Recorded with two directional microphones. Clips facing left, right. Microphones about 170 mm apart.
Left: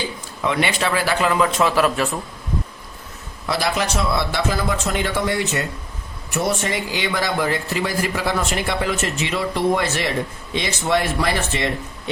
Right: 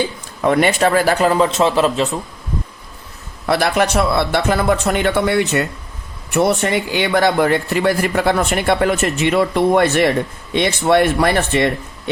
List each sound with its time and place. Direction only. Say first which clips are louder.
0.4 s a man's voice: right 7 dB; 45° right (ahead or behind); by 2.1 s 20° right (ahead or behind)
3.4 s speech: right 6 dB; 55° right (ahead or behind)